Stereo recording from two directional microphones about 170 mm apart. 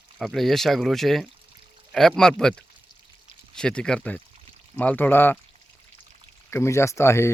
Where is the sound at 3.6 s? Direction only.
5° left (ahead or behind).